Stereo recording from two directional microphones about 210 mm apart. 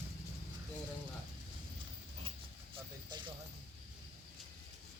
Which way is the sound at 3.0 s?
20° right (ahead or behind).